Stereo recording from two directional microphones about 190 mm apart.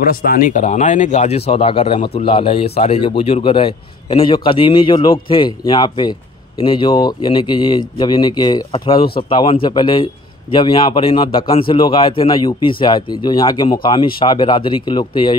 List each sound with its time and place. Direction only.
0.1 s a man's voice: 50° left (ahead or behind); by 15.3 s 25° left (ahead or behind)